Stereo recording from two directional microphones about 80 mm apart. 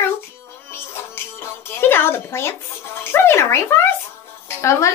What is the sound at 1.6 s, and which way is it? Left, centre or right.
A woman's voice, left.